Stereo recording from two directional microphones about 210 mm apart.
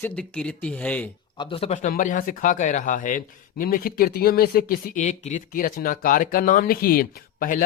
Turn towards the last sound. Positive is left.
turn(degrees=40)  # may be behind; listen again after turning